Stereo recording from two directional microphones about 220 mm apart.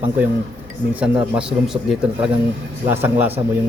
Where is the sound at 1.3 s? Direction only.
5° right (ahead or behind).